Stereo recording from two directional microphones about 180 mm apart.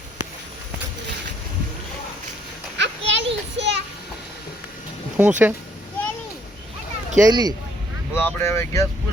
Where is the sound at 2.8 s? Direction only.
80° right.